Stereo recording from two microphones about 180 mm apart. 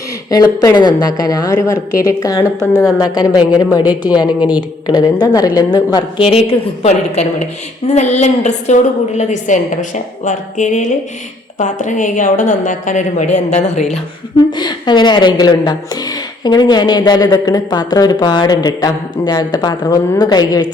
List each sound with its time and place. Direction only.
0.3 s a woman's voice: 20° left (ahead or behind)
6.3 s a woman's voice: 35° left (ahead or behind)
14.5 s a woman's voice: 25° left (ahead or behind)